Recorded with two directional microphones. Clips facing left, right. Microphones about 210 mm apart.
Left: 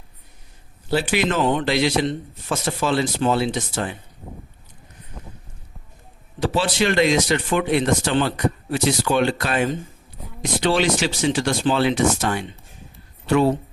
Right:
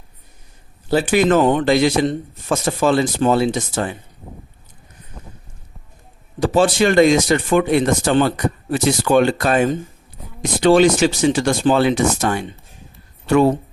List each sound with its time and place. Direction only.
0.9 s a man's voice: 45° right (ahead or behind)
6.4 s a man's voice: 45° right (ahead or behind)